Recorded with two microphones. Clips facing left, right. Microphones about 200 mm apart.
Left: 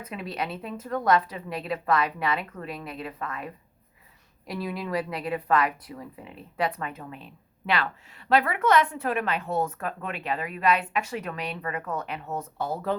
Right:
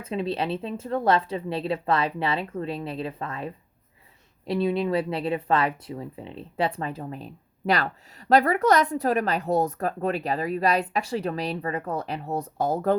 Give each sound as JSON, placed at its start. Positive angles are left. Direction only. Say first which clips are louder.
{"t": 0.0, "sound": "a woman's voice", "louder": "right 6 dB", "side_deg": -25}